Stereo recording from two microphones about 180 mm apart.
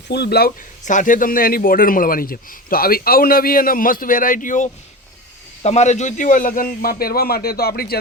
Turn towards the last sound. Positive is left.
turn(degrees=60)  # may be behind; listen again after turning